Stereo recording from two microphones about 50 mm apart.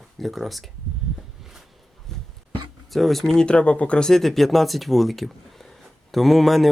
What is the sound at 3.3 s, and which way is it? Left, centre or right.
Speech, left.